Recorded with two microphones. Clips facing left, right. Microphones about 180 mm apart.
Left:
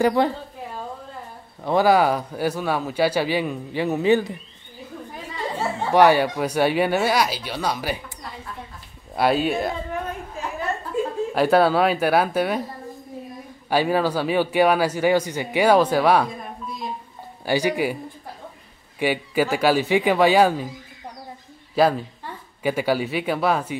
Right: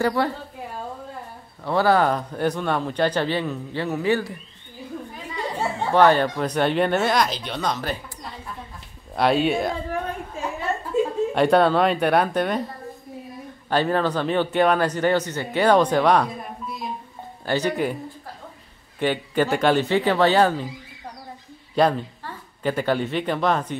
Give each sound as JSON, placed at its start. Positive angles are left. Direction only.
{"t": 0.0, "sound": "a woman's voice", "side_deg": 20}
{"t": 1.6, "sound": "a man's voice", "side_deg": 15}
{"t": 5.9, "sound": "a man's voice", "side_deg": 10}
{"t": 9.1, "sound": "speech", "side_deg": 5}
{"t": 10.9, "sound": "chuckle", "side_deg": -25}
{"t": 11.3, "sound": "speech", "side_deg": 5}
{"t": 13.7, "sound": "a man's voice", "side_deg": 10}
{"t": 17.5, "sound": "a man's voice", "side_deg": 10}
{"t": 18.9, "sound": "a man's voice", "side_deg": 10}
{"t": 21.7, "sound": "a woman's voice", "side_deg": 5}